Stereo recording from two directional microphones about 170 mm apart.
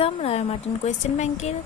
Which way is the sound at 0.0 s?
35° left (ahead or behind).